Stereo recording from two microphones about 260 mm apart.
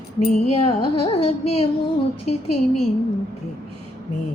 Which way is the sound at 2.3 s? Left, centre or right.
Left.